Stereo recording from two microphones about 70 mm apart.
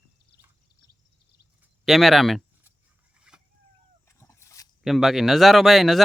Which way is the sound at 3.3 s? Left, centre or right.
Centre.